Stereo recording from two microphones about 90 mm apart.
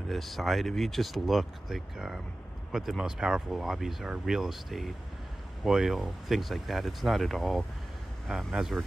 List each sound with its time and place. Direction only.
0.1 s speech: centre (ahead or behind)